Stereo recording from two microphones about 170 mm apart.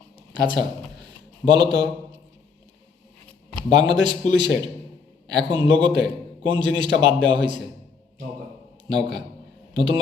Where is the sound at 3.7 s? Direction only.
25° right (ahead or behind).